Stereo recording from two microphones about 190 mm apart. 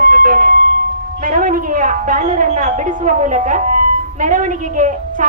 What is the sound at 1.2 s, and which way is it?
A woman's voice, 45° right (ahead or behind).